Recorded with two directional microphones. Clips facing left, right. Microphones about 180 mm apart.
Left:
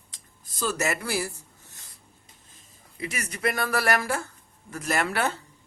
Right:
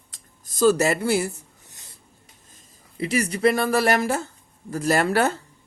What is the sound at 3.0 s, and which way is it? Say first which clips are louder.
Speech: right 9 dB; 30° right (ahead or behind).